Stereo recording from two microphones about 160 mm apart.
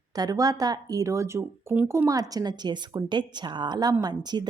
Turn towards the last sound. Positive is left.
turn(degrees=-25)  # may be behind; listen again after turning